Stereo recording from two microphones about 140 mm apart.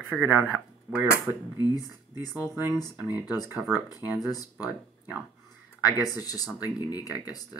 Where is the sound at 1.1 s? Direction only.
25° left (ahead or behind).